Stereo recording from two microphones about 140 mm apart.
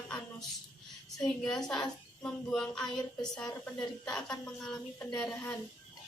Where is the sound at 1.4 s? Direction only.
5° left (ahead or behind).